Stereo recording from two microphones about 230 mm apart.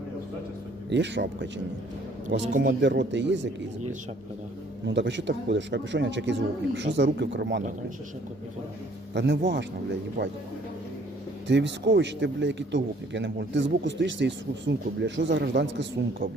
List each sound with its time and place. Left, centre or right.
0.9 s a man's voice: right
2.4 s speech: right
2.6 s a man's voice: right
4.9 s a man's voice: right
9.1 s a man's voice: right
11.4 s a man's voice: right